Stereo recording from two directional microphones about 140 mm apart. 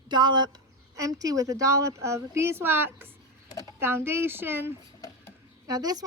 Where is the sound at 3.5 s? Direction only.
25° left (ahead or behind).